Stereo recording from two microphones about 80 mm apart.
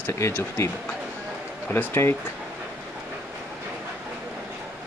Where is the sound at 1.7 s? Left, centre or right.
Left.